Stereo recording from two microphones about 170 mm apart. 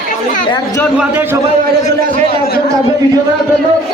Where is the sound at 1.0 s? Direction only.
10° right (ahead or behind).